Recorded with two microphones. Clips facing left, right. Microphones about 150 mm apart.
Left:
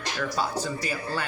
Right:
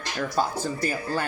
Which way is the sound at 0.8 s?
45° right (ahead or behind).